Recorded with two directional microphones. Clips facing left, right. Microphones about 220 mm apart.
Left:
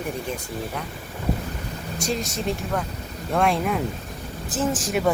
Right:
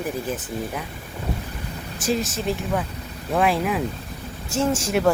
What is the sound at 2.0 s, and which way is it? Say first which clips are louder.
Speech: right 3 dB; centre (ahead or behind).